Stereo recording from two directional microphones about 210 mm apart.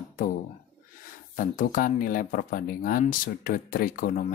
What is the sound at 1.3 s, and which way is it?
Speech, 40° left (ahead or behind).